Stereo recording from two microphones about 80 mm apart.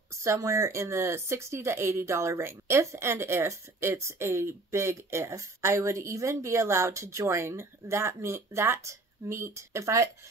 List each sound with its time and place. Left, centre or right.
0.2 s speech: right